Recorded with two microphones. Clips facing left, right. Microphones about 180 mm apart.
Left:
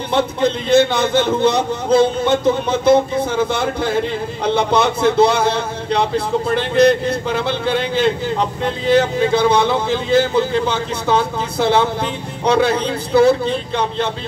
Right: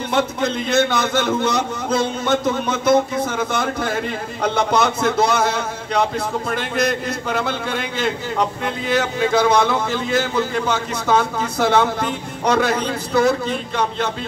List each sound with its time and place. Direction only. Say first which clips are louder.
0.1 s a man's voice: left 4 dB; 30° left (ahead or behind)